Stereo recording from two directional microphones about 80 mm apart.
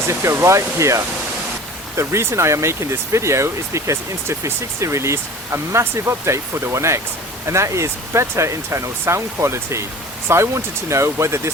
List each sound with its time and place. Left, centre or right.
0.1 s speech: right